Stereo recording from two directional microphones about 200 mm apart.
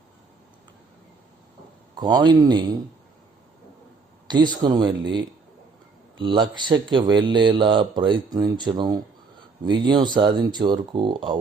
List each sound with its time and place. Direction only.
2.0 s speech: 20° right (ahead or behind)
4.3 s speech: 20° right (ahead or behind)